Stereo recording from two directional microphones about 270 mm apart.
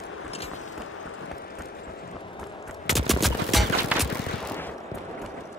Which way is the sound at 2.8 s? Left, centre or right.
Centre.